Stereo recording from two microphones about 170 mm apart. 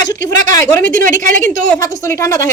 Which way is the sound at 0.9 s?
50° right (ahead or behind).